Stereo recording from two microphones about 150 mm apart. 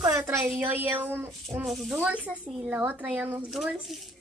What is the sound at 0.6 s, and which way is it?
Speech, 15° right (ahead or behind).